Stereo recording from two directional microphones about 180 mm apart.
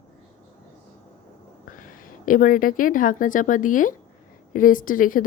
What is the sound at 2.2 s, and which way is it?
A woman's voice, 50° left (ahead or behind).